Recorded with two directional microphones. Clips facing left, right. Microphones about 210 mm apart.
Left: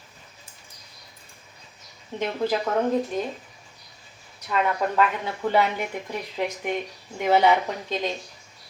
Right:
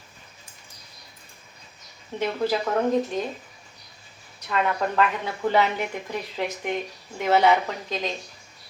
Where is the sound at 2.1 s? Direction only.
15° left (ahead or behind).